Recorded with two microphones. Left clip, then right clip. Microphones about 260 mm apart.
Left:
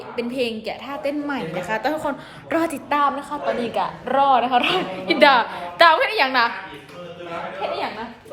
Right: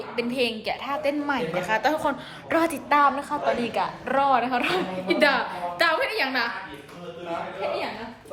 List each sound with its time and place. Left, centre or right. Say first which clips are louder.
0.2 s a woman's voice: left 1 dB; centre